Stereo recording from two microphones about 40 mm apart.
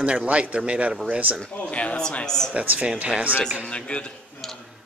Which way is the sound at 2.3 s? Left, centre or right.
Centre.